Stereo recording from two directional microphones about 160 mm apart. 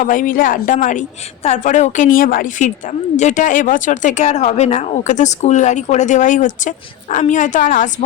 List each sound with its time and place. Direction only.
0.0 s a woman's voice: 55° left (ahead or behind)